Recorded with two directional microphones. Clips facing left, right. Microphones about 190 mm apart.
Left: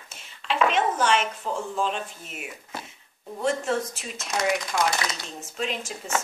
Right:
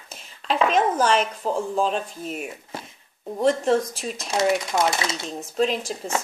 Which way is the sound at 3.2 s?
35° right (ahead or behind).